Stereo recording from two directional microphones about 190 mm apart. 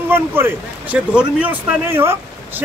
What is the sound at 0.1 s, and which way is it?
Speech, 10° right (ahead or behind).